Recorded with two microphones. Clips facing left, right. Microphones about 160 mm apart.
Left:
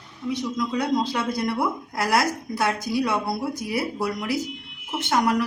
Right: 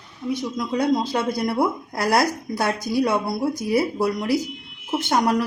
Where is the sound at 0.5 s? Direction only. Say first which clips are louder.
Right 3 dB; 35° right (ahead or behind).